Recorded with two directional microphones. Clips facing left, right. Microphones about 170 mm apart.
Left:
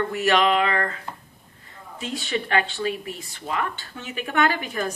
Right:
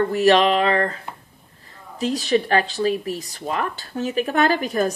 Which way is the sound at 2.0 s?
35° right (ahead or behind).